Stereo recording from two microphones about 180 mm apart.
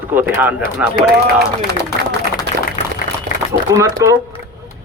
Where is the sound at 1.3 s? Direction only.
65° right (ahead or behind).